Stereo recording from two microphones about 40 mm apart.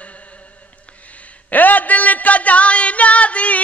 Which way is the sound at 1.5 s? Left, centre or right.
Left.